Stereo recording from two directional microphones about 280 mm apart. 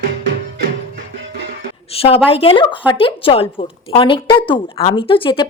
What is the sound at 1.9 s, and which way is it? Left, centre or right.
A woman's voice, left.